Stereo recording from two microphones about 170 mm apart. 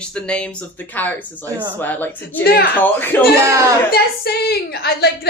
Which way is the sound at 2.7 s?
10° left (ahead or behind).